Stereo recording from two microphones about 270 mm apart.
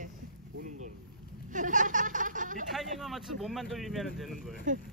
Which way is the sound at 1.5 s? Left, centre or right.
Right.